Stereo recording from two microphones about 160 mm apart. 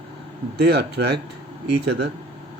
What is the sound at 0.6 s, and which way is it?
Speech, 90° right.